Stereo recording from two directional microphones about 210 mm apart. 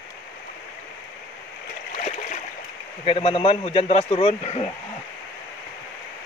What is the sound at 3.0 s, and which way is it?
A man's voice, 30° left (ahead or behind).